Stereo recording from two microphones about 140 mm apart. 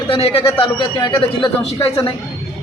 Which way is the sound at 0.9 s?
30° left (ahead or behind).